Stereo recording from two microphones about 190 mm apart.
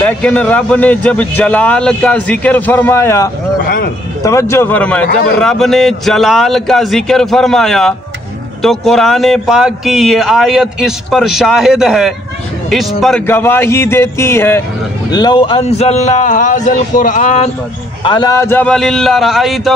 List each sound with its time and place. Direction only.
0.0 s a man's voice: 5° left (ahead or behind)
3.6 s a sound: 55° left (ahead or behind)
4.2 s a man's voice: 15° left (ahead or behind)
13.3 s a man's voice: 10° left (ahead or behind); by 17.5 s 40° left (ahead or behind)
18.0 s speech: 25° left (ahead or behind); by 19.7 s centre (ahead or behind)